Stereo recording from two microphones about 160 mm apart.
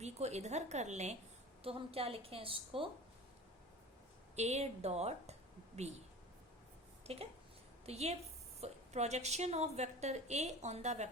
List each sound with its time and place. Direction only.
0.0 s a woman's voice: 45° right (ahead or behind)
4.4 s a woman's voice: 45° right (ahead or behind)
7.0 s a woman's voice: 40° right (ahead or behind)